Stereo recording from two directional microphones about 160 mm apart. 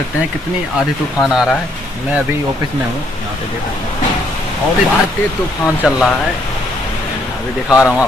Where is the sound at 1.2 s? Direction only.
5° right (ahead or behind).